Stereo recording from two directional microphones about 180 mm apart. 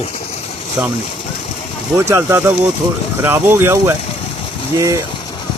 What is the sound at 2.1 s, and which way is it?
Speech, 15° right (ahead or behind).